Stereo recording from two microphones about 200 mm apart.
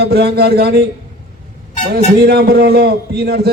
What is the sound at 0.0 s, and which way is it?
Speech, 55° right (ahead or behind).